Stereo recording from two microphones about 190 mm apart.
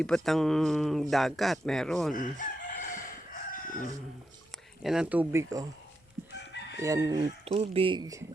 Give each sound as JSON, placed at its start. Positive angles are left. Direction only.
{"t": 0.0, "sound": "speech", "side_deg": 0}
{"t": 2.1, "sound": "chicken", "side_deg": 45}
{"t": 4.8, "sound": "speech", "side_deg": -5}
{"t": 6.7, "sound": "chicken", "side_deg": -15}
{"t": 7.4, "sound": "speech", "side_deg": -30}